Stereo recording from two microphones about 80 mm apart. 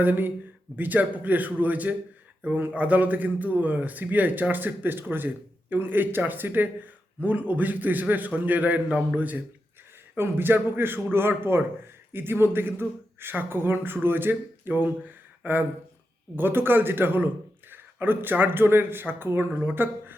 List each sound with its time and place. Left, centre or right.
0.0 s a man's voice: right